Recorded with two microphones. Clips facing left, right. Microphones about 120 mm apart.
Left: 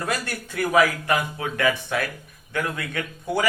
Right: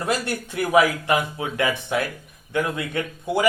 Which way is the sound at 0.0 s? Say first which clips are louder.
Right 3 dB; 20° right (ahead or behind).